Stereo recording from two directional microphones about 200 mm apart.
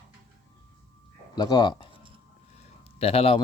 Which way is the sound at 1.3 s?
20° left (ahead or behind).